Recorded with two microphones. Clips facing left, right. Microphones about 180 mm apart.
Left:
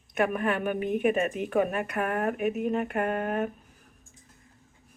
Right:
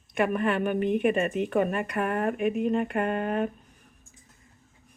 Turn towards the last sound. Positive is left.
turn(degrees=5)  # may be behind; listen again after turning